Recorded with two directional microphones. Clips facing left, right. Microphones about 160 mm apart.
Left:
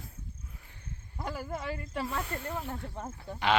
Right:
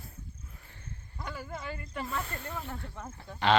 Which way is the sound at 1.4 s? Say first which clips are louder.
Left 3 dB; 30° left (ahead or behind).